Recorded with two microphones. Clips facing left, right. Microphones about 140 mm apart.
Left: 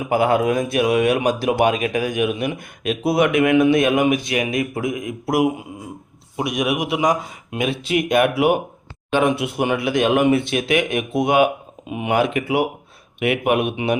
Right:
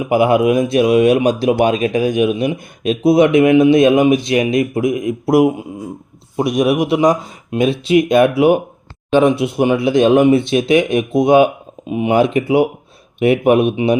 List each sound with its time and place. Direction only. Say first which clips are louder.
0.1 s speech: right 5 dB; 15° right (ahead or behind)
5.2 s a man's voice: right 6 dB; 35° right (ahead or behind)